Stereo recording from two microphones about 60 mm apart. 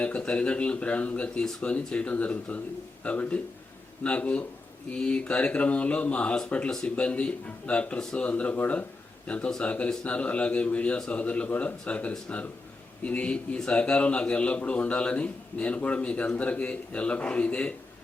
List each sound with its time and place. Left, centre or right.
0.0 s speech: centre